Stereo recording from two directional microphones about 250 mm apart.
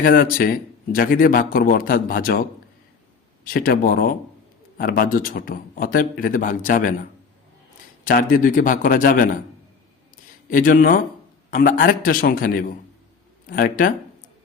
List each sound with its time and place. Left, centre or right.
0.0 s a man's voice: left
8.0 s a man's voice: left
10.5 s a man's voice: left